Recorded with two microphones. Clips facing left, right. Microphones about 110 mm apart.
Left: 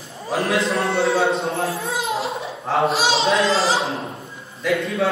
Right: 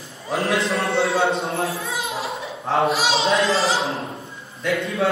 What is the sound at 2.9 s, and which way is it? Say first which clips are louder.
Speech: left 1 dB; 30° left (ahead or behind).